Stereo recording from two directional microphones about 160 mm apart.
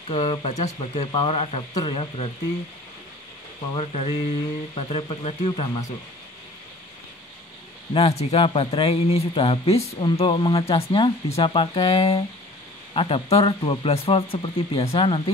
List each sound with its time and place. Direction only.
0.1 s a man's voice: 40° left (ahead or behind)
3.7 s a man's voice: 40° left (ahead or behind)
7.9 s a man's voice: 40° left (ahead or behind)